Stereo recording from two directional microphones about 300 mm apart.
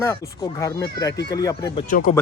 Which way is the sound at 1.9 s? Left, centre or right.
Left.